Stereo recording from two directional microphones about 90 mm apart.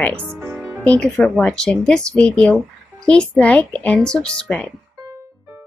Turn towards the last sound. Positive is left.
turn(degrees=10)  # may be behind; listen again after turning